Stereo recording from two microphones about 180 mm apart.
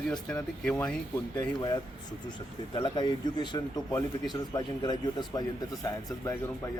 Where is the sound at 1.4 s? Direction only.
20° left (ahead or behind).